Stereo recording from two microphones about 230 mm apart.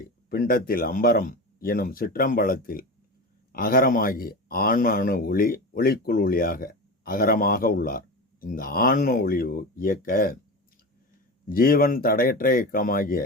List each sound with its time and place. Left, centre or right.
0.3 s speech: left
11.4 s speech: left